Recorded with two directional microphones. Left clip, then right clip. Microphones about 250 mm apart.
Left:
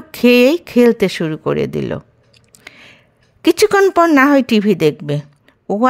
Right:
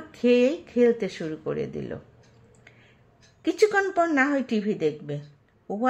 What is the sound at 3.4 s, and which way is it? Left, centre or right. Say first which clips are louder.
Speech: left 11 dB; left.